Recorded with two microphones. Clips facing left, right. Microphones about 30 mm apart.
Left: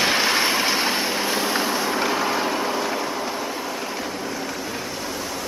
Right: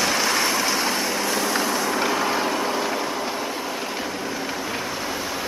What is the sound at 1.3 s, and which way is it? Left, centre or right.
Vehicle, left.